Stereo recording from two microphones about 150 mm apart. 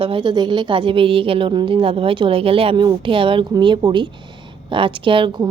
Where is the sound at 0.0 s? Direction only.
35° right (ahead or behind).